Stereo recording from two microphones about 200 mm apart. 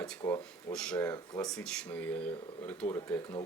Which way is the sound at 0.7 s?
5° left (ahead or behind).